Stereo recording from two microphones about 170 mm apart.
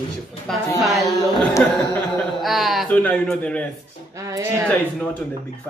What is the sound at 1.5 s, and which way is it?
Speech, 15° left (ahead or behind).